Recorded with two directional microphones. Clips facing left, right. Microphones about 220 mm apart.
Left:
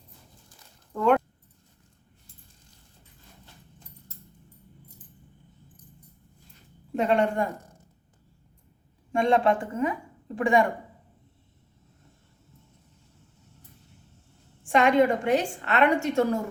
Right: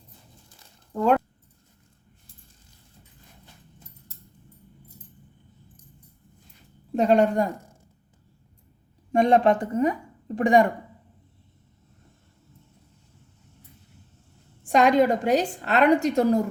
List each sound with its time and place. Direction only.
6.9 s a woman's voice: 35° right (ahead or behind)
9.1 s a woman's voice: 40° right (ahead or behind)
14.6 s a woman's voice: 35° right (ahead or behind)